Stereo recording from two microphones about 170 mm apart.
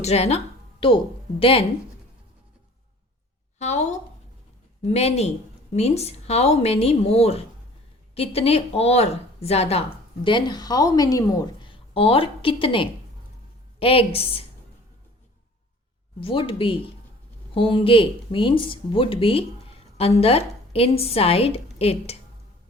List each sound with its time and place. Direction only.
0.0 s a woman's voice: 40° left (ahead or behind)
3.6 s speech: 40° left (ahead or behind)
10.2 s a woman's voice: 25° left (ahead or behind)
16.2 s speech: 30° left (ahead or behind)